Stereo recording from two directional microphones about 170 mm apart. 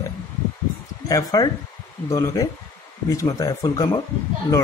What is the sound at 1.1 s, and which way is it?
Speech, 20° left (ahead or behind).